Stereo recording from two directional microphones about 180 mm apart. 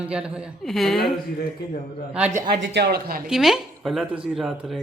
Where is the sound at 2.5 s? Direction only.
65° right (ahead or behind).